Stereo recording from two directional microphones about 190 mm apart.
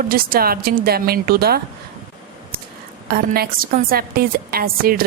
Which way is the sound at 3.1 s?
55° right (ahead or behind).